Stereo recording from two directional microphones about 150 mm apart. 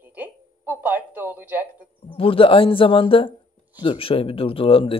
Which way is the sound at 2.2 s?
35° left (ahead or behind).